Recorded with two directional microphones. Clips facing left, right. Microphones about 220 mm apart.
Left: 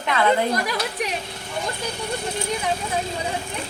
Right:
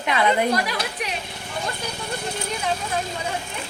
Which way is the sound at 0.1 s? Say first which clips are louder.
Left 1 dB; 15° right (ahead or behind).